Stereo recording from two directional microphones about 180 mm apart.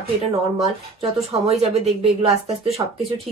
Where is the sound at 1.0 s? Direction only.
35° right (ahead or behind).